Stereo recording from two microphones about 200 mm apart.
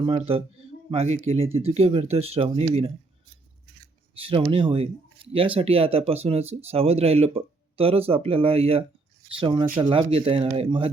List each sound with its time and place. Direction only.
0.0 s speech: 25° right (ahead or behind)
4.2 s speech: 25° right (ahead or behind)